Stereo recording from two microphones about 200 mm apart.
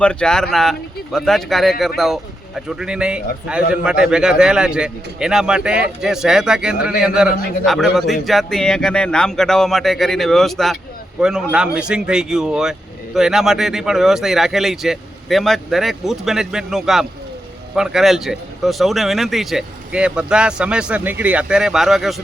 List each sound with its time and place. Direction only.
0.0 s speech: 5° left (ahead or behind)